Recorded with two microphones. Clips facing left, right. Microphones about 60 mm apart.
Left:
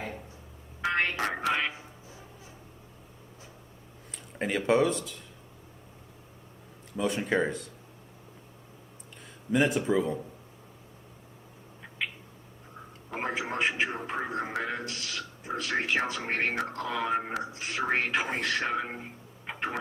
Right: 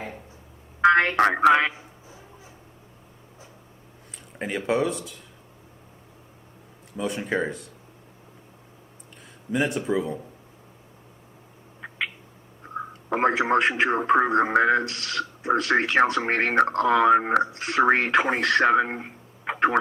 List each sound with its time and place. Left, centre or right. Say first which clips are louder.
0.8 s speech: right 11 dB; right
4.4 s speech: even; centre
6.9 s speech: right 1 dB; centre
9.5 s speech: right 1 dB; centre
11.8 s cat: right 5 dB; right
13.1 s a man's voice: right 11 dB; right